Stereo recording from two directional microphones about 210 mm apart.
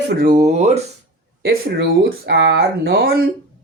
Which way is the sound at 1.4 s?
50° right (ahead or behind).